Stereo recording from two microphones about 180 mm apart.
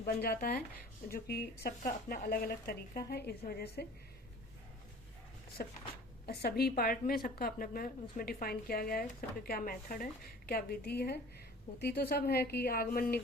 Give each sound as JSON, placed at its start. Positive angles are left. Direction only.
{"t": 0.0, "sound": "a woman's voice", "side_deg": 60}
{"t": 5.6, "sound": "a woman's voice", "side_deg": 55}